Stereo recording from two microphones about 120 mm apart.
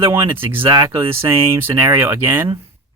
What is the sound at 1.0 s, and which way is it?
Speech, 20° right (ahead or behind).